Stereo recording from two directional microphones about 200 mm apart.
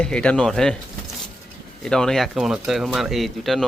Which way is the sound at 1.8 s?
5° left (ahead or behind).